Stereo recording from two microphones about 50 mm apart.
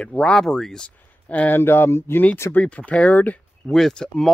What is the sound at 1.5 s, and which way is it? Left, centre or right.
Speech, left.